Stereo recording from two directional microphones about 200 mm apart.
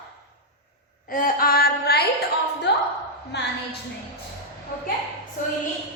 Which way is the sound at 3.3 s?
60° left (ahead or behind).